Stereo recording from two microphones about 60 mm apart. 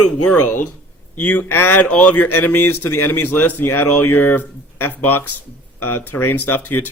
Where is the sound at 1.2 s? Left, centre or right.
Left.